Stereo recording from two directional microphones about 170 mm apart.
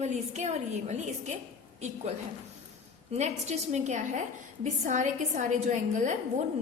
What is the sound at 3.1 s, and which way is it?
A woman's voice, 40° right (ahead or behind).